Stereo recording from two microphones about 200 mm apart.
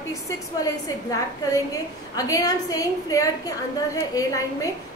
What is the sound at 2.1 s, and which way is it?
A woman's voice, 20° left (ahead or behind).